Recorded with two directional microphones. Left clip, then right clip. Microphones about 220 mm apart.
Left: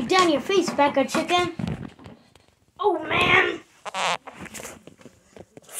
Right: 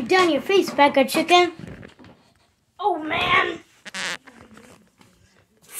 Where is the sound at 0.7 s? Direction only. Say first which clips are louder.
Right 5 dB; 20° right (ahead or behind).